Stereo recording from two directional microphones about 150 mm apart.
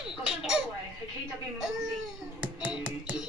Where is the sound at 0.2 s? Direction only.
5° right (ahead or behind).